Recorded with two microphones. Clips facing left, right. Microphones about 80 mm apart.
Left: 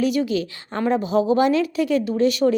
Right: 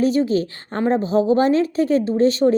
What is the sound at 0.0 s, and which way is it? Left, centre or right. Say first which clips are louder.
Speech: right 3 dB; right.